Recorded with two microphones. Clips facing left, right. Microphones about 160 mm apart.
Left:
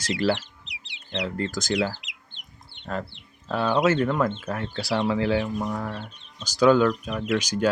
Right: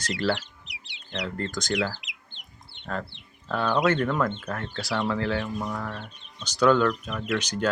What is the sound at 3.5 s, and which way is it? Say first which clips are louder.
Speech: left 2 dB; 10° left (ahead or behind).